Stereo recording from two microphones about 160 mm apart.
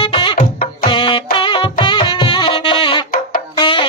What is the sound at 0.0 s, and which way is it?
Music, 35° left (ahead or behind).